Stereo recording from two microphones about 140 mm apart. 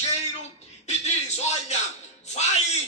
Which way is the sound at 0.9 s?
55° left (ahead or behind).